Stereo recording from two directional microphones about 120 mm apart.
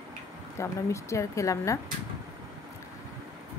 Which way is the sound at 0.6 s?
25° left (ahead or behind).